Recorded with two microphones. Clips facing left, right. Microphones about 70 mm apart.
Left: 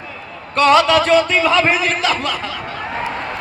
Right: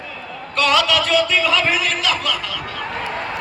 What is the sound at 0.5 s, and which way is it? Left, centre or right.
A man's voice, left.